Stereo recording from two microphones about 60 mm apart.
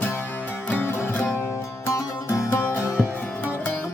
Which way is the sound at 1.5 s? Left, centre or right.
Left.